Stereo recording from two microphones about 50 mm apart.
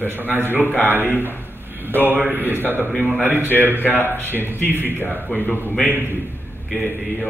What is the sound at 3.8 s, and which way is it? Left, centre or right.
A man's voice, left.